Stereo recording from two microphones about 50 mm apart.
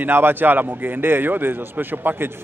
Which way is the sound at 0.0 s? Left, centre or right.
Right.